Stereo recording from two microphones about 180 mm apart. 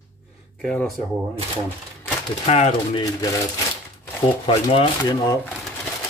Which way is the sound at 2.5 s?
35° left (ahead or behind).